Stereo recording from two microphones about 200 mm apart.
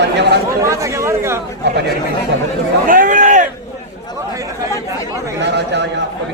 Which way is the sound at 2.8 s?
40° right (ahead or behind).